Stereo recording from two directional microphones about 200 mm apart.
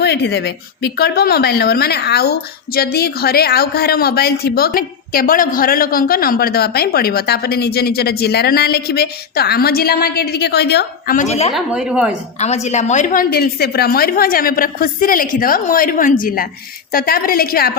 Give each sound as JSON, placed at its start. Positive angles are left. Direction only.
{"t": 0.0, "sound": "speech", "side_deg": 55}
{"t": 11.5, "sound": "a woman's voice", "side_deg": -5}
{"t": 12.4, "sound": "speech", "side_deg": 35}